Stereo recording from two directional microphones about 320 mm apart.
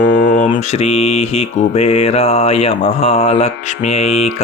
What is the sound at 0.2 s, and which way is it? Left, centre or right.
Mantra, left.